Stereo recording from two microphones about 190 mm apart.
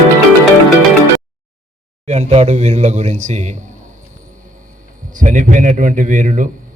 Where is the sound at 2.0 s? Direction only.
35° right (ahead or behind).